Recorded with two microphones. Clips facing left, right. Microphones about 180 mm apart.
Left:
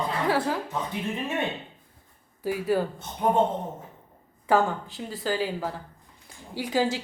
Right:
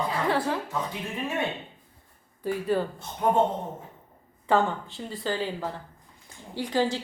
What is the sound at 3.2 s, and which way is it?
Speech, 20° left (ahead or behind).